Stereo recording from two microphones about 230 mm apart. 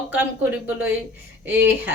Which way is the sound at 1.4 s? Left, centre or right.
Centre.